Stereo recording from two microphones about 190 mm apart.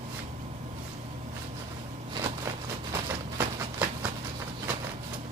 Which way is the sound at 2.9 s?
15° right (ahead or behind).